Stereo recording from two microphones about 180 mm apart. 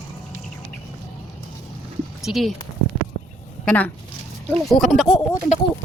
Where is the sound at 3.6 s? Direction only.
10° left (ahead or behind).